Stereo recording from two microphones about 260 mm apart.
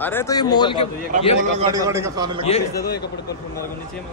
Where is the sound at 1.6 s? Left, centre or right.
Centre.